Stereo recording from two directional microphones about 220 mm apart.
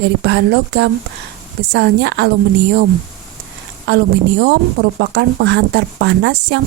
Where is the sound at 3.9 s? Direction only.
50° right (ahead or behind).